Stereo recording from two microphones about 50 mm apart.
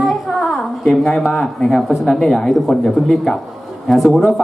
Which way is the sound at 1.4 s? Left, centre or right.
Centre.